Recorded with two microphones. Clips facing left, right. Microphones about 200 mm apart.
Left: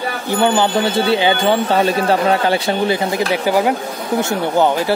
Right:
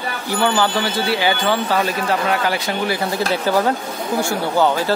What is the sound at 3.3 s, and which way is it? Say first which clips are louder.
Speech: left 1 dB; 15° left (ahead or behind).